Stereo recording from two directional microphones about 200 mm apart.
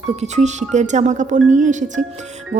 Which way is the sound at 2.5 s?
35° right (ahead or behind).